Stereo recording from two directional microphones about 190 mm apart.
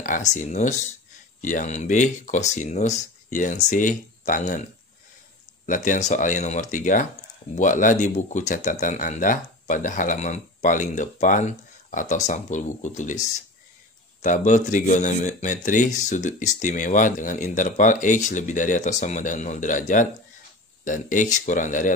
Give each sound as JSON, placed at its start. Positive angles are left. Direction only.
{"t": 0.0, "sound": "speech", "side_deg": 40}
{"t": 5.7, "sound": "speech", "side_deg": 40}